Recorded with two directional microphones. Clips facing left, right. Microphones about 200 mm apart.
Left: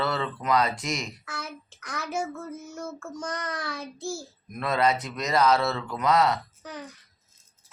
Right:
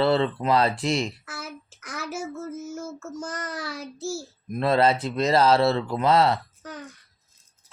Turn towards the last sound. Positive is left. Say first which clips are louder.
# right 1 dB
turn(degrees=0)  # may be behind; listen again after turning